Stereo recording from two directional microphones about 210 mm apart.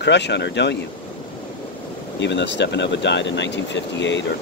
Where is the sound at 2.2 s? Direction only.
55° left (ahead or behind).